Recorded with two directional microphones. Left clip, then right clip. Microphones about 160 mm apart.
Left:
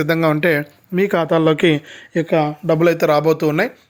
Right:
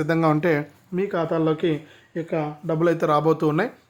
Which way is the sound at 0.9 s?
60° left (ahead or behind).